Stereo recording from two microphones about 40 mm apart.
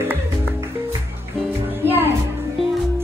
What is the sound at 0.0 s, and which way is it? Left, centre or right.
Music, right.